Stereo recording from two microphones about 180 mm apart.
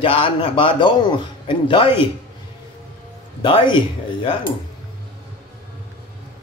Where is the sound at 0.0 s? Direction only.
30° left (ahead or behind).